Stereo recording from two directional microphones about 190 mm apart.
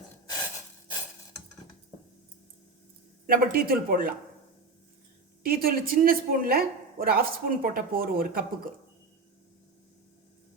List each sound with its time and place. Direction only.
3.2 s speech: 50° right (ahead or behind)
5.5 s speech: 50° right (ahead or behind)